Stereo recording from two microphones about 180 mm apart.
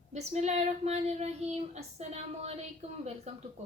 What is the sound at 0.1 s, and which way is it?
Child singing, 40° right (ahead or behind).